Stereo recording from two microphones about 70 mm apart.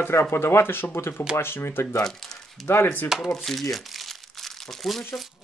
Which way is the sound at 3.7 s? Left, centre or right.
Centre.